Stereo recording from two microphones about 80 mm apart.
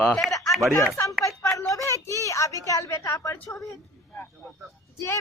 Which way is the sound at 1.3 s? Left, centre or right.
Left.